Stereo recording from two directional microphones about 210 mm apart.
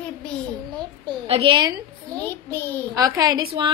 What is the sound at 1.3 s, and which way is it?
Speech, 25° right (ahead or behind).